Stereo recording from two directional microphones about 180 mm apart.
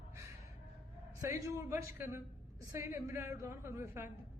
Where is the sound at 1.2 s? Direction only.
15° right (ahead or behind).